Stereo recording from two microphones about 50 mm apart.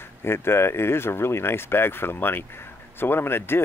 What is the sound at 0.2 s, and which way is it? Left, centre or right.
Speech, left.